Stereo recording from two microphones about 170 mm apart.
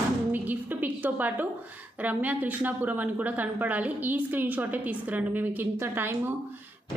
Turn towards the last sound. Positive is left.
turn(degrees=-10)  # may be behind; listen again after turning